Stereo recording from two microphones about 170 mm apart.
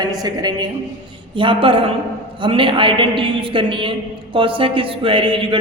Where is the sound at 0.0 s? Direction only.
20° right (ahead or behind).